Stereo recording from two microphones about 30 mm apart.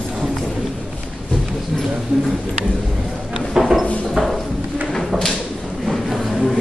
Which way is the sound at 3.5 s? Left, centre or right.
Centre.